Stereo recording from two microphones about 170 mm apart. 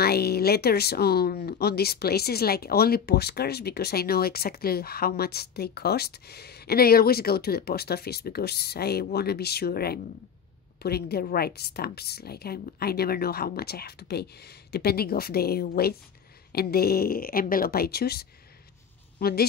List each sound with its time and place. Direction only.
0.0 s a woman's voice: 65° left (ahead or behind)